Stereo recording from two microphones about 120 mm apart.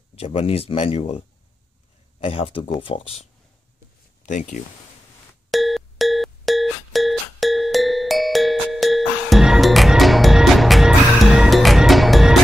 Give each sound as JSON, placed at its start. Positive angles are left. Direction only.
{"t": 0.1, "sound": "speech", "side_deg": 55}
{"t": 4.3, "sound": "speech", "side_deg": 90}
{"t": 5.5, "sound": "music", "side_deg": 0}